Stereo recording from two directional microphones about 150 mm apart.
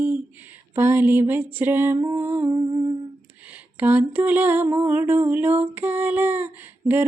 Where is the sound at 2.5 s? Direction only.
25° right (ahead or behind).